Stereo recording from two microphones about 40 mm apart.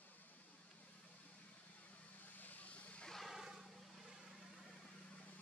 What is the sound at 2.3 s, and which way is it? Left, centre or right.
Vehicle, left.